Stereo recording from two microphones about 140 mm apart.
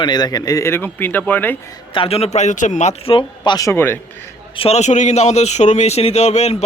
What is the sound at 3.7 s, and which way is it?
Speech, 15° left (ahead or behind).